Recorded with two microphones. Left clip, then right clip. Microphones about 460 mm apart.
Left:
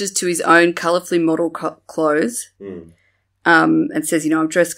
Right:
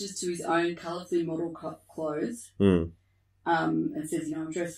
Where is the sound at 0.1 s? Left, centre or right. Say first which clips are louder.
Left 16 dB; left.